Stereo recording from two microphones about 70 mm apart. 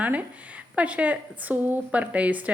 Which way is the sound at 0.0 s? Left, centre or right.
Right.